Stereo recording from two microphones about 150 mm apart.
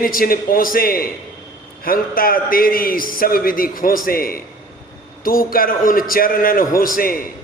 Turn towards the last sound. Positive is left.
turn(degrees=70)  # may be behind; listen again after turning